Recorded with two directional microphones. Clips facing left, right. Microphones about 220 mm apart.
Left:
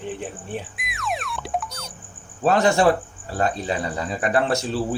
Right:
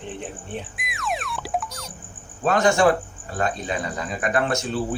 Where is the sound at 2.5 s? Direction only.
35° left (ahead or behind).